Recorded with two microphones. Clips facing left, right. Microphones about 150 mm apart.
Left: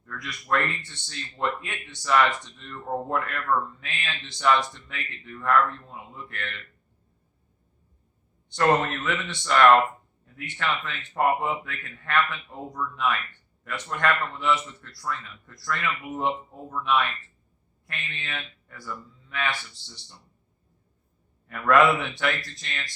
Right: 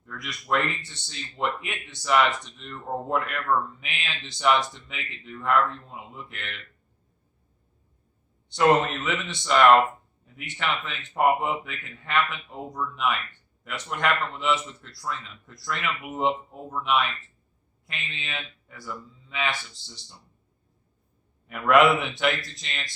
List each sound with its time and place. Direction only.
0.3 s speech: 15° right (ahead or behind)
8.5 s speech: 15° right (ahead or behind)
21.4 s speech: 15° right (ahead or behind)